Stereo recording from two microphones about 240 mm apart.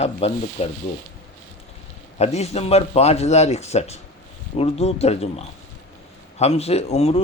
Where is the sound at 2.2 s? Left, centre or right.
Left.